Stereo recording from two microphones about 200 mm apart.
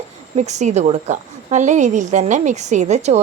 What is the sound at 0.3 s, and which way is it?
A woman's voice, 35° right (ahead or behind).